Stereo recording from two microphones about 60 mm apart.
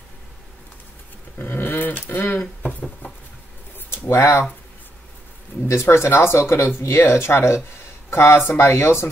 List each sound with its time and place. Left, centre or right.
1.4 s speech: left
3.9 s a sound: left
5.7 s speech: left